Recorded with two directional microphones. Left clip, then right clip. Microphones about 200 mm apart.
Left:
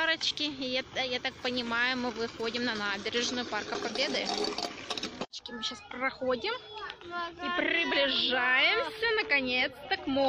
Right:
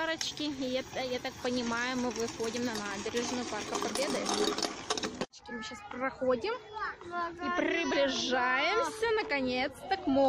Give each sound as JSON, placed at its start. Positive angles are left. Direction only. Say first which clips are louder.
{"t": 0.0, "sound": "a woman's voice", "louder": "left 5 dB", "side_deg": -10}
{"t": 4.3, "sound": "ratchet", "louder": "right 1 dB", "side_deg": -25}
{"t": 5.9, "sound": "a woman's voice", "louder": "right 1 dB", "side_deg": 0}